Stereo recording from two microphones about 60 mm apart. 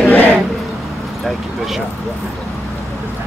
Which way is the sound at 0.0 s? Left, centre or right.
Left.